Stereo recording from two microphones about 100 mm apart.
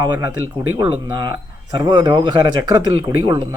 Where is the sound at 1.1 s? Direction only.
50° right (ahead or behind).